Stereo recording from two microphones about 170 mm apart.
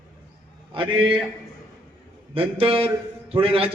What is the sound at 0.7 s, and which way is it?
Speech, 30° right (ahead or behind).